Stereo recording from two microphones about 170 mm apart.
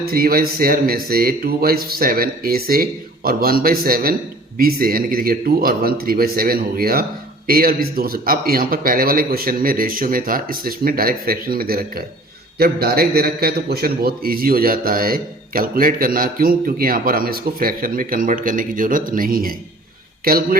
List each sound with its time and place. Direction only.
0.0 s a man's voice: 60° right (ahead or behind)